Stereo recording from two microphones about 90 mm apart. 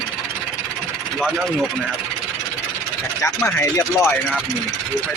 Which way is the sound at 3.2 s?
30° left (ahead or behind).